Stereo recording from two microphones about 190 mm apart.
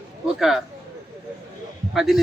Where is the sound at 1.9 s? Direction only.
Centre (ahead or behind).